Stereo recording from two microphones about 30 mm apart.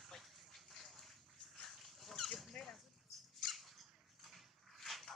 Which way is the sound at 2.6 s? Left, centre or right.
Left.